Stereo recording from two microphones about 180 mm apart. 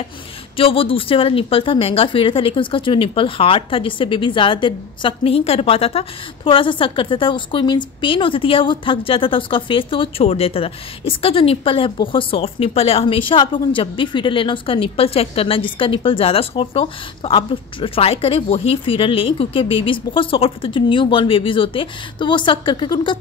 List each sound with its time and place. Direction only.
0.6 s a woman's voice: 30° left (ahead or behind)